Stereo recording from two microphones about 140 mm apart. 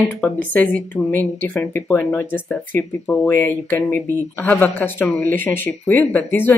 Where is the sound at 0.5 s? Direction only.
10° left (ahead or behind).